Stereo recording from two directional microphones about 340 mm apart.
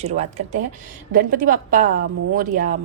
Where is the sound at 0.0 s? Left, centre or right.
Centre.